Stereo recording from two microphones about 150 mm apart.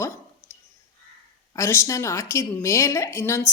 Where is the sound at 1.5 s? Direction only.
20° left (ahead or behind).